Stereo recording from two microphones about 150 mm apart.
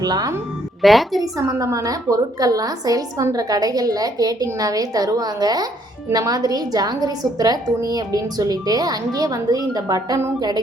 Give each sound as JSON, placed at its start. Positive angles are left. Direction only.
{"t": 0.0, "sound": "a woman's voice", "side_deg": -25}
{"t": 0.8, "sound": "a woman's voice", "side_deg": 0}
{"t": 1.2, "sound": "a woman's voice", "side_deg": -25}